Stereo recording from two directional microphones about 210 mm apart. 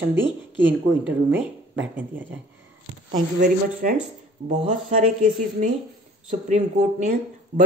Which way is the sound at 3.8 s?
40° right (ahead or behind).